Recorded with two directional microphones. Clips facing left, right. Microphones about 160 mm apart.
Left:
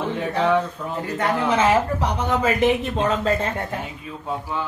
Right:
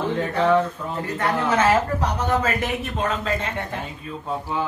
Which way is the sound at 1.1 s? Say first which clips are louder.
Left 1 dB; 20° left (ahead or behind).